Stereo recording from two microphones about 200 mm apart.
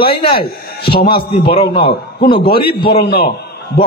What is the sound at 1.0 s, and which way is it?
A man's voice, 25° left (ahead or behind).